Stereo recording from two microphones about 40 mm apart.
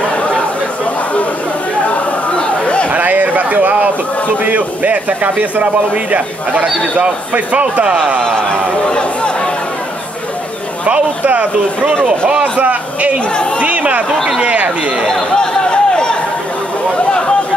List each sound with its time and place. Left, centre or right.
1.9 s a sound: left
2.9 s a sound: right
4.5 s speech: right
7.0 s speech: right
8.8 s speech: left
12.0 s speech: right
12.5 s a man's voice: right
13.6 s chatter: right
14.4 s speech: right
15.3 s a sound: left